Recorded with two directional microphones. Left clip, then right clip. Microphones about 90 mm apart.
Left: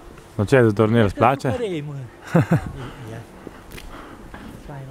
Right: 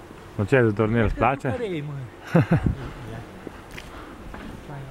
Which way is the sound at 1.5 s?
55° left (ahead or behind).